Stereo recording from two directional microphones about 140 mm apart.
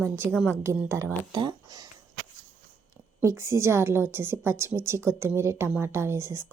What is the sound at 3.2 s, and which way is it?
Speech, 20° right (ahead or behind).